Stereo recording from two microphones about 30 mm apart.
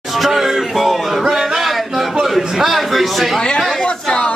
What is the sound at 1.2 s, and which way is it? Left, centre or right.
Music, centre.